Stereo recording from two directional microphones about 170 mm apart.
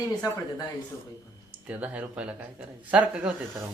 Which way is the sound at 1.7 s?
10° right (ahead or behind).